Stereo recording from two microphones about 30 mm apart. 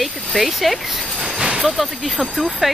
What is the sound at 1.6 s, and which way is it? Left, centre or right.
Speech, centre.